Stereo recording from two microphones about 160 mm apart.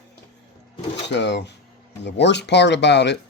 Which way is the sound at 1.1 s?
90° left.